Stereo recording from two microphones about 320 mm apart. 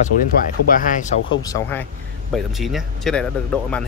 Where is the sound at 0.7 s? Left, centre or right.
Left.